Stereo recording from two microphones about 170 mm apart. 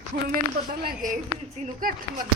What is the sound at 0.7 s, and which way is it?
Speech, 60° right (ahead or behind).